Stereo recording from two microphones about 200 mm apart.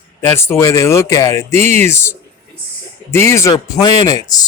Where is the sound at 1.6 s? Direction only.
35° right (ahead or behind).